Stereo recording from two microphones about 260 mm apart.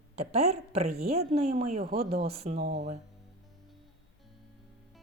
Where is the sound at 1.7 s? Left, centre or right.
Right.